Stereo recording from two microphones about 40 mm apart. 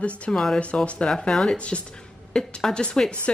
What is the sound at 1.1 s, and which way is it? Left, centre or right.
A woman's voice, centre.